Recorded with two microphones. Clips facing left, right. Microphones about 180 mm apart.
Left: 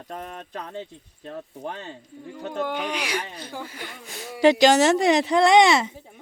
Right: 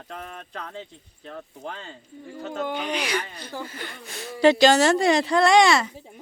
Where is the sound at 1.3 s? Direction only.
20° left (ahead or behind).